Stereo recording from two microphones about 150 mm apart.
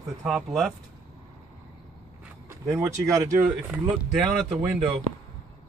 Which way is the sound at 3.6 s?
5° right (ahead or behind).